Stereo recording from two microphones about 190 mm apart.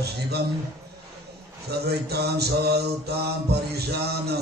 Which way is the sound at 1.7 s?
60° right (ahead or behind).